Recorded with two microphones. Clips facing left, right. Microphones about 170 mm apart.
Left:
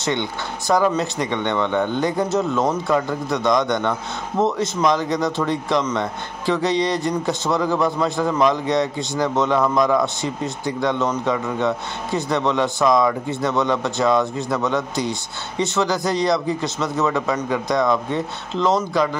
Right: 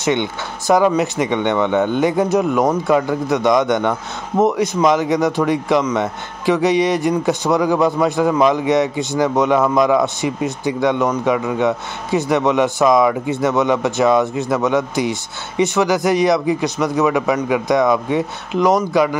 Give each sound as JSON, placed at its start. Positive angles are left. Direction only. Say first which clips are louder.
{"t": 0.0, "sound": "a man's voice", "louder": "right 5 dB", "side_deg": -20}